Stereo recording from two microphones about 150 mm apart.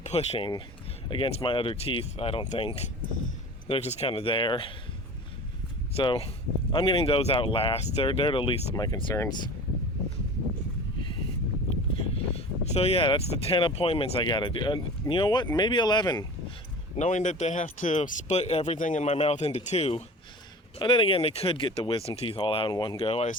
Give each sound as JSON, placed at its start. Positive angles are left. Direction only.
{"t": 0.0, "sound": "speech", "side_deg": 45}
{"t": 6.0, "sound": "speech", "side_deg": 35}
{"t": 11.9, "sound": "speech", "side_deg": 40}
{"t": 17.0, "sound": "speech", "side_deg": 50}
{"t": 18.8, "sound": "speech", "side_deg": 55}
{"t": 20.7, "sound": "speech", "side_deg": 35}